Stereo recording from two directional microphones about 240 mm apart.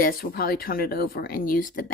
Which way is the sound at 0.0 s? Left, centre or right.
Left.